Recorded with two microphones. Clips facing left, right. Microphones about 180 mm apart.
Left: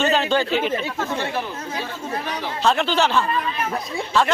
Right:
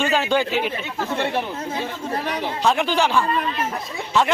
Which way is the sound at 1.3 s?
25° right (ahead or behind).